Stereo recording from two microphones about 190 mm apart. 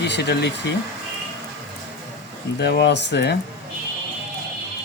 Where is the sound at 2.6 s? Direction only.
60° left (ahead or behind).